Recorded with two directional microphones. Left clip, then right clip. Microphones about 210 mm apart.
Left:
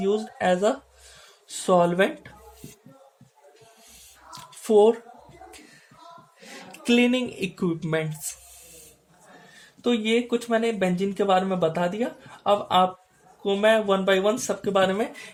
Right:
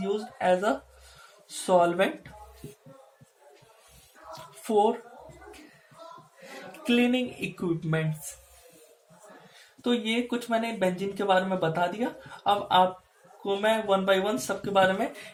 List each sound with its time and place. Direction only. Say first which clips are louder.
0.0 s speech: left 4 dB; 50° left (ahead or behind)
4.6 s speech: left 6 dB; 50° left (ahead or behind)
6.7 s speech: left 4 dB; 50° left (ahead or behind)
9.8 s speech: left 5 dB; 50° left (ahead or behind)